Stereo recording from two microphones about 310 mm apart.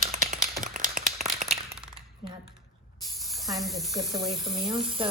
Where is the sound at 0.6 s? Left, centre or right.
Right.